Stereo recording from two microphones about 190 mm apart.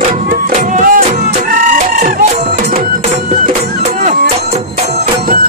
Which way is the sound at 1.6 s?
45° right (ahead or behind).